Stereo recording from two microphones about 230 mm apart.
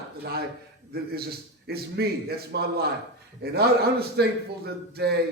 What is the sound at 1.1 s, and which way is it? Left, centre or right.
Speech, right.